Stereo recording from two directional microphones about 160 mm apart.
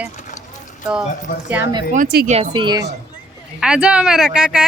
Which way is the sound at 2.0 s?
90° right.